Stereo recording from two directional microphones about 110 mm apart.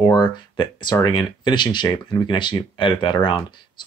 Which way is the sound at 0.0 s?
45° left (ahead or behind).